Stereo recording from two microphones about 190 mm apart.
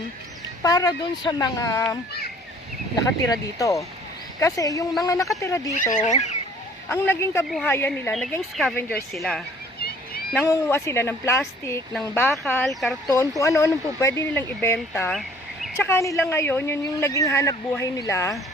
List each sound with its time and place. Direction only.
0.6 s speech: 20° left (ahead or behind)
3.2 s speech: 15° left (ahead or behind)
5.7 s fowl: 45° left (ahead or behind)
6.8 s speech: 10° left (ahead or behind)
8.1 s speech: centre (ahead or behind)
8.7 s speech: 10° left (ahead or behind)
10.5 s speech: 15° left (ahead or behind)
13.1 s speech: 15° left (ahead or behind)